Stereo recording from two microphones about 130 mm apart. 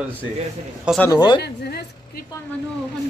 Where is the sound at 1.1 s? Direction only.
35° left (ahead or behind).